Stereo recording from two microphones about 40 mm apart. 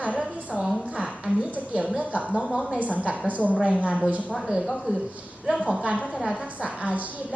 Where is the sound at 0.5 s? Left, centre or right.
Centre.